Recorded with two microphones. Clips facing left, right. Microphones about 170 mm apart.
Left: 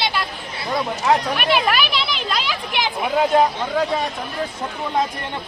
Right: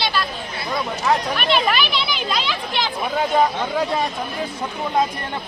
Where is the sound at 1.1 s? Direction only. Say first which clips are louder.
Left 1 dB; 10° left (ahead or behind).